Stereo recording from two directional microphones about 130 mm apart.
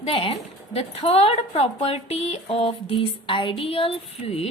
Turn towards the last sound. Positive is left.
turn(degrees=50)  # may be behind; listen again after turning